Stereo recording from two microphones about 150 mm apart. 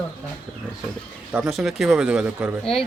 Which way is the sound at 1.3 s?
5° right (ahead or behind).